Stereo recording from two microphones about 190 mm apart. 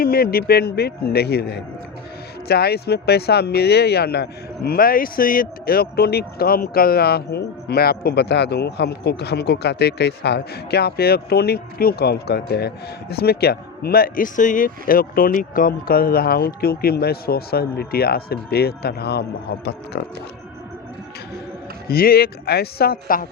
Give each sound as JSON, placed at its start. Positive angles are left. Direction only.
{"t": 0.0, "sound": "speech", "side_deg": 50}
{"t": 21.8, "sound": "speech", "side_deg": 55}